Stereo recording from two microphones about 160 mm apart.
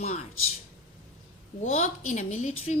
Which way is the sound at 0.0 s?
45° left (ahead or behind).